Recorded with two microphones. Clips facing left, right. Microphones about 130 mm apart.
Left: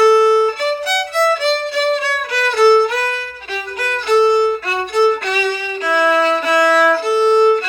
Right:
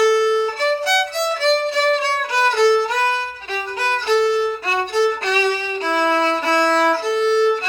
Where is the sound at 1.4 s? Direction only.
35° right (ahead or behind).